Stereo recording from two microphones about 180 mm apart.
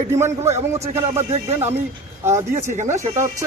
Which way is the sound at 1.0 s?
35° right (ahead or behind).